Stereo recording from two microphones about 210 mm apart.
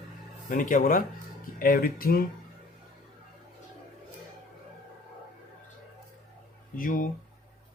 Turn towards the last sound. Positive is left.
turn(degrees=40)  # may be behind; listen again after turning